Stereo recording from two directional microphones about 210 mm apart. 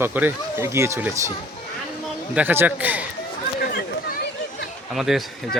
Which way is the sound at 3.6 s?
45° left (ahead or behind).